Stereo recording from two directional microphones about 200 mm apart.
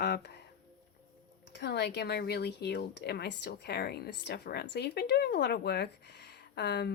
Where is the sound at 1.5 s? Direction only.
60° left (ahead or behind).